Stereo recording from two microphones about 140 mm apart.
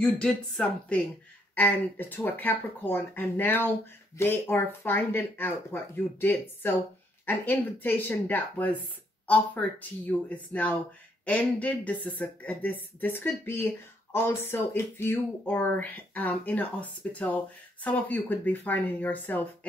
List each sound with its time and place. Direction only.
0.0 s speech: 5° left (ahead or behind)